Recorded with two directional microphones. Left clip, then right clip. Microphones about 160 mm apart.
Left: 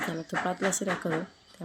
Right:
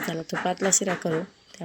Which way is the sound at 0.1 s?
10° right (ahead or behind).